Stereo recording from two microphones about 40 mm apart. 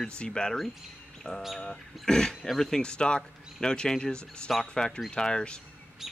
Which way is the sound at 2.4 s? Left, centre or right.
Centre.